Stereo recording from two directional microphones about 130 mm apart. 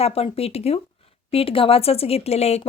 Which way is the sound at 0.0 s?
50° left (ahead or behind).